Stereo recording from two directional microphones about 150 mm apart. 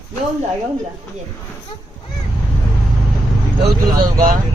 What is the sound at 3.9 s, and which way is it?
Speech, 25° right (ahead or behind).